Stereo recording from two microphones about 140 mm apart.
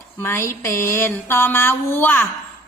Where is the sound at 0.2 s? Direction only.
15° left (ahead or behind).